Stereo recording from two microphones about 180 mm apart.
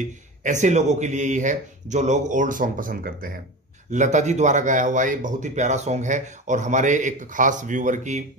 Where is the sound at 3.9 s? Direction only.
40° right (ahead or behind).